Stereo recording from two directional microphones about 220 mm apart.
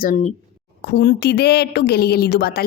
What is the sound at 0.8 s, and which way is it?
Speech, 45° left (ahead or behind).